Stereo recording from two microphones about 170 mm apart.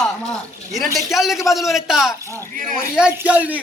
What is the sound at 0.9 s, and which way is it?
A man's voice, centre (ahead or behind).